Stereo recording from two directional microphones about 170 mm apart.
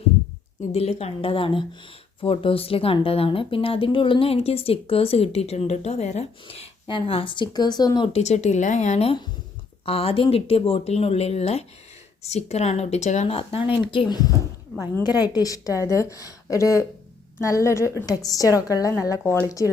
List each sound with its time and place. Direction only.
0.7 s a woman's voice: 40° left (ahead or behind)
8.1 s a woman's voice: 40° left (ahead or behind); by 14.4 s 20° left (ahead or behind)
14.8 s a woman's voice: 15° right (ahead or behind)
15.3 s a woman's voice: 20° left (ahead or behind)